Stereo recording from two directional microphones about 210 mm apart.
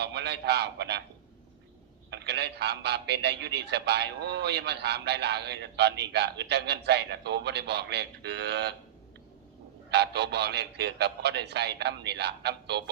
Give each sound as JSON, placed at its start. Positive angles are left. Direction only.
{"t": 0.0, "sound": "a man's voice", "side_deg": -55}
{"t": 2.0, "sound": "a man's voice", "side_deg": -55}
{"t": 9.9, "sound": "a man's voice", "side_deg": -55}